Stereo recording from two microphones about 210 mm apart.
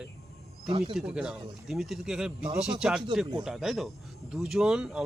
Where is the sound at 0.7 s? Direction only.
25° right (ahead or behind).